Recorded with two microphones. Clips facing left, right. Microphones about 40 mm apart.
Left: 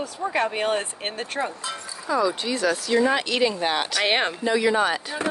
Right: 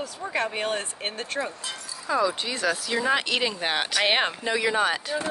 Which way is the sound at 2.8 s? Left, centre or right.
Centre.